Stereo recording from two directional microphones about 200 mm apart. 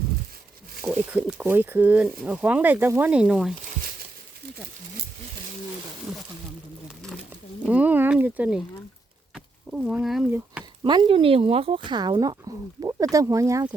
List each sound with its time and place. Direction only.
0.8 s speech: 5° right (ahead or behind)
7.7 s speech: 10° right (ahead or behind)
9.3 s a sound: 5° right (ahead or behind)
10.8 s speech: 25° right (ahead or behind)